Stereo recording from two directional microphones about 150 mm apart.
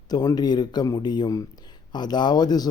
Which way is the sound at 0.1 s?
25° left (ahead or behind).